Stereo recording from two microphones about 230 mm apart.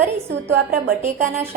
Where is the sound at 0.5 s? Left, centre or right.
Right.